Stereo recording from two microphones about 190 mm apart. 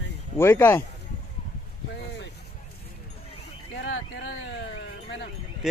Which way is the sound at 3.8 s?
70° left (ahead or behind).